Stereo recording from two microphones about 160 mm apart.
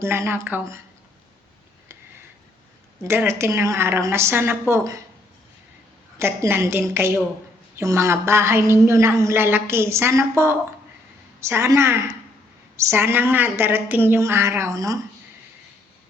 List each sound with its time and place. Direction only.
0.0 s a woman's voice: 15° right (ahead or behind)
3.0 s a woman's voice: 15° right (ahead or behind)
6.1 s a woman's voice: 15° right (ahead or behind)